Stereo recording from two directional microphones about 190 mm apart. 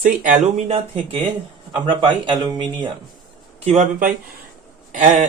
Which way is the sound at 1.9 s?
25° right (ahead or behind).